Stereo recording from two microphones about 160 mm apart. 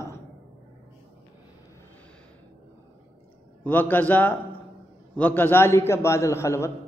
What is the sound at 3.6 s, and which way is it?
A man's voice, 10° left (ahead or behind).